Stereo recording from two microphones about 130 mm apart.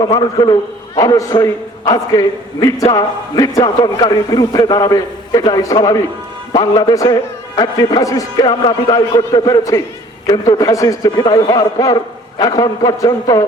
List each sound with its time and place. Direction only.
0.0 s a man's voice: 35° left (ahead or behind)